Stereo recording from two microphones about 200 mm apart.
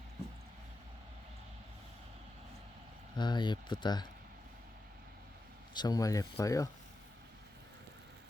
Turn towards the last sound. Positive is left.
turn(degrees=15)  # may be behind; listen again after turning